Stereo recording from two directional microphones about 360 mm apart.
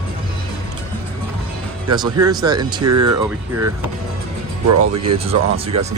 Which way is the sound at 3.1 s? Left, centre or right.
Centre.